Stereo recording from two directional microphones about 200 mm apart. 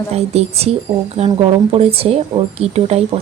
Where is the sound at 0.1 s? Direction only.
30° right (ahead or behind).